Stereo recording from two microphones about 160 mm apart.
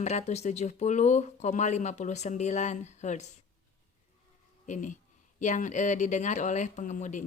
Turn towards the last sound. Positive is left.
turn(degrees=50)  # may be behind; listen again after turning